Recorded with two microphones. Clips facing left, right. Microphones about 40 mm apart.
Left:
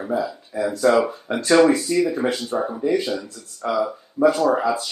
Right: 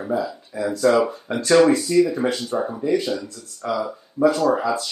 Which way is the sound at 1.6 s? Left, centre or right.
Centre.